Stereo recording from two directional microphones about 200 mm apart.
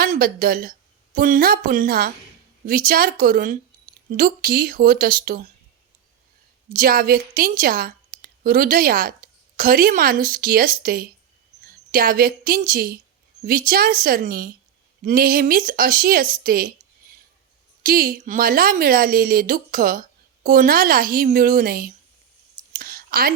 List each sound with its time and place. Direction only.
0.0 s speech: 45° right (ahead or behind)
6.7 s a woman's voice: 45° right (ahead or behind)
22.7 s a sound: 45° right (ahead or behind)